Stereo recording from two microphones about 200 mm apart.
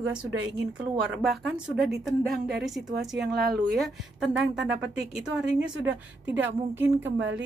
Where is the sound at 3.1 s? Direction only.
55° right (ahead or behind).